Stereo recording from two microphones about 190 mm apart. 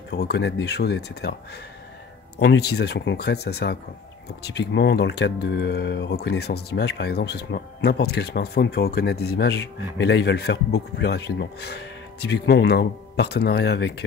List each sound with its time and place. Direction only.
0.1 s speech: 60° left (ahead or behind)
2.3 s speech: 60° left (ahead or behind)